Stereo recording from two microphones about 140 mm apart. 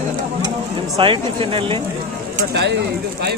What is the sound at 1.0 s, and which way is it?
Speech, 40° right (ahead or behind).